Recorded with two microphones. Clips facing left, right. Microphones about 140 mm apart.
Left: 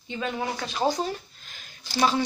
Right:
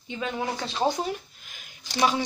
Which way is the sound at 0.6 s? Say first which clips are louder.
Even; 25° right (ahead or behind).